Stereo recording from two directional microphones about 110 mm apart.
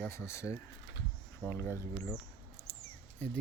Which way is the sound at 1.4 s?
20° left (ahead or behind).